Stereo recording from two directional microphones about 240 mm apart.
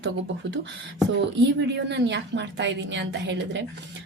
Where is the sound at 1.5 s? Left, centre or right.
Right.